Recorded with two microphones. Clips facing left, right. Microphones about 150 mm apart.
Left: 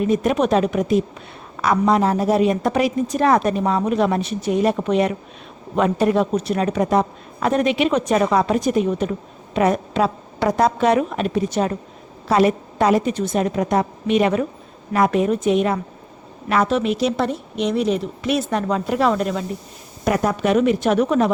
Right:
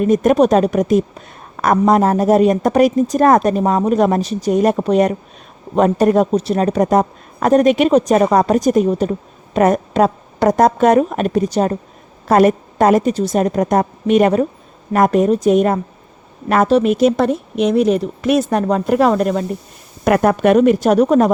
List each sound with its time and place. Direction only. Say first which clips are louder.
0.0 s a woman's voice: right 6 dB; 45° right (ahead or behind)
9.6 s a woman's voice: right 5 dB; 45° right (ahead or behind)
11.5 s a woman's voice: right 4 dB; 35° right (ahead or behind)
12.3 s a woman's voice: right 5 dB; 50° right (ahead or behind)
20.1 s speech: right 6 dB; 60° right (ahead or behind)
20.6 s a woman's voice: right 5 dB; 40° right (ahead or behind)